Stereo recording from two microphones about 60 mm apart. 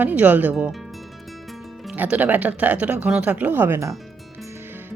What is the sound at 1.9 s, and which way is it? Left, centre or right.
Speech, right.